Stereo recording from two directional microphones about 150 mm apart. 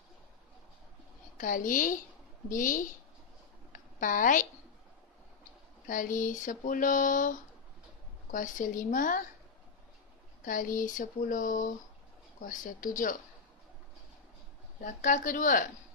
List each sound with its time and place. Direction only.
1.4 s a woman's voice: 60° left (ahead or behind)
5.9 s speech: 60° left (ahead or behind)
10.4 s speech: 60° left (ahead or behind)
14.8 s speech: 60° left (ahead or behind)